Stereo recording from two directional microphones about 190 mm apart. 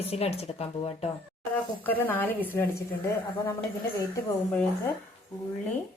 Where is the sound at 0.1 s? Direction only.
30° left (ahead or behind).